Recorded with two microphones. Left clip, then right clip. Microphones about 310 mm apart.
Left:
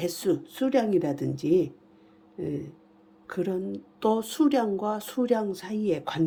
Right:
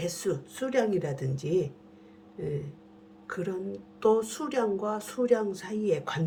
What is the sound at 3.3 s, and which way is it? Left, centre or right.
Speech, left.